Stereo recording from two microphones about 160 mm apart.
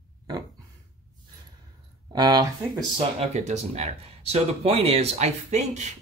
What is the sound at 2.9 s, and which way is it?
Speech, 45° right (ahead or behind).